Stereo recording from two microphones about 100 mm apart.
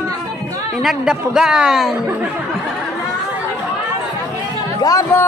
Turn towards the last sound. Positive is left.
turn(degrees=25)  # may be behind; listen again after turning